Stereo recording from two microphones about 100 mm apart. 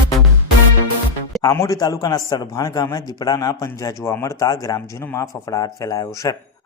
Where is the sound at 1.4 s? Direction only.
35° left (ahead or behind).